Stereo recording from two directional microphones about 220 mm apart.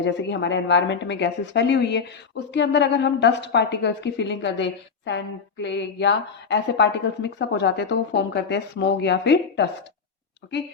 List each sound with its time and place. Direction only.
0.0 s a woman's voice: 50° left (ahead or behind)